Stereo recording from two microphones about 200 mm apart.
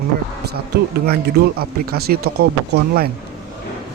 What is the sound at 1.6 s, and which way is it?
Speech, 50° right (ahead or behind).